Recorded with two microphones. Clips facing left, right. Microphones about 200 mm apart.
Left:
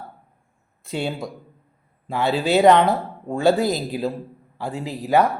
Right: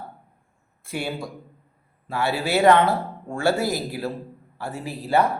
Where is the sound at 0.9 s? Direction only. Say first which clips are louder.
Left 3 dB; 20° left (ahead or behind).